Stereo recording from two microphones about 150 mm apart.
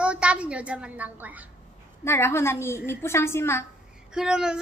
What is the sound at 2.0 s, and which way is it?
Speech, 15° left (ahead or behind).